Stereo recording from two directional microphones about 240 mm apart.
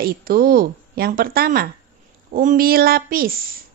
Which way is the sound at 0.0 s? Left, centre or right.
Right.